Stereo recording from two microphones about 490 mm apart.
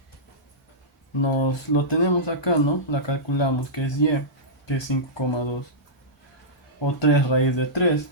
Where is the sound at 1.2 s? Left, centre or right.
Left.